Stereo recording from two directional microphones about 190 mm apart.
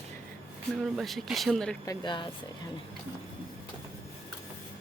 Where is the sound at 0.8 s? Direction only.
Centre (ahead or behind).